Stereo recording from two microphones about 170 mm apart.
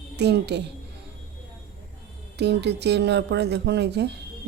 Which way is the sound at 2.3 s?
85° right.